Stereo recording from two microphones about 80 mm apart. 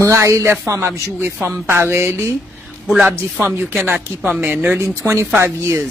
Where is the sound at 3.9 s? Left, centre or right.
Centre.